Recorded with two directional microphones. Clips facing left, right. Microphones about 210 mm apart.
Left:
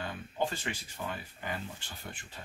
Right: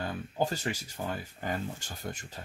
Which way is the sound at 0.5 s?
40° right (ahead or behind).